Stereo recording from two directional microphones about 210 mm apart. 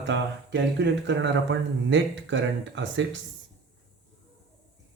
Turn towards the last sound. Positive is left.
turn(degrees=-60)  # may be behind; listen again after turning